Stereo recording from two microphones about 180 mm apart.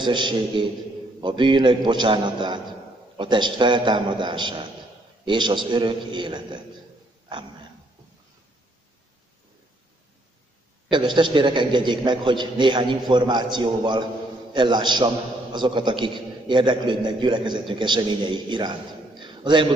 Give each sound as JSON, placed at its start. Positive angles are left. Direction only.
{"t": 0.0, "sound": "a man's voice", "side_deg": -25}
{"t": 10.9, "sound": "a man's voice", "side_deg": -25}